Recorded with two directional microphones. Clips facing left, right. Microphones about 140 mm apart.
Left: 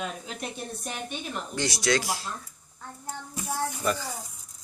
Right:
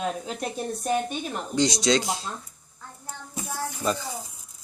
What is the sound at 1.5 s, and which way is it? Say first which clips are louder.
Speech: right 4 dB; 20° right (ahead or behind).